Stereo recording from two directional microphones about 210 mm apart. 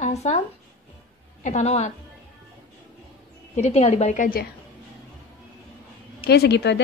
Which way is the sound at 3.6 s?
30° left (ahead or behind).